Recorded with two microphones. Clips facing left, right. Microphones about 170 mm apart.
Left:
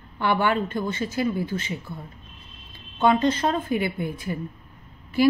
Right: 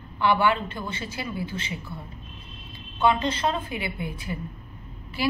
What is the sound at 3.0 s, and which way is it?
Speech, 50° left (ahead or behind).